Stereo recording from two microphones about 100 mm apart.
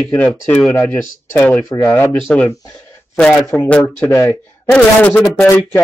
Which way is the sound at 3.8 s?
25° left (ahead or behind).